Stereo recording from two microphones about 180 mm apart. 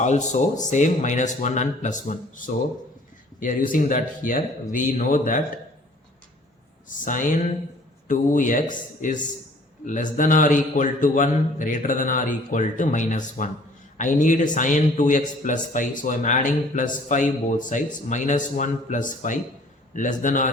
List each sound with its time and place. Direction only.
0.0 s speech: 40° left (ahead or behind)
3.4 s speech: 50° left (ahead or behind)
6.8 s speech: 45° left (ahead or behind)